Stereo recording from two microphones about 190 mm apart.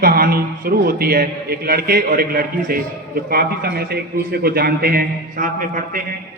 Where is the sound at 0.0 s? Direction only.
50° right (ahead or behind).